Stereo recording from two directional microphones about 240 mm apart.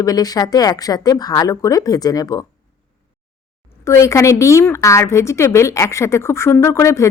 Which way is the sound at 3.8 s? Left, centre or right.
Centre.